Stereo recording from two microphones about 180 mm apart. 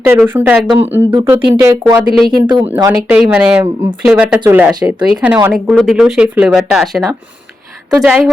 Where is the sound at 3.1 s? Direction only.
10° right (ahead or behind).